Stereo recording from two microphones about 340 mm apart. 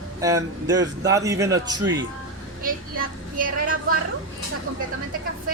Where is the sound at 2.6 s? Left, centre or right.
Right.